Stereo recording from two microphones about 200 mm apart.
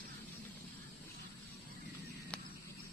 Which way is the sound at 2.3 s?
5° left (ahead or behind).